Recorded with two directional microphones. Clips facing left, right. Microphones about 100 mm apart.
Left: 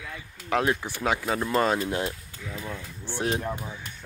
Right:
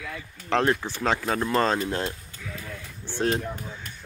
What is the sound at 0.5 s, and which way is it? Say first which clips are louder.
Speech: right 2 dB; 10° left (ahead or behind).